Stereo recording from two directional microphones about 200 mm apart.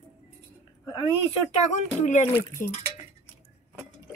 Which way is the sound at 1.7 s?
40° left (ahead or behind).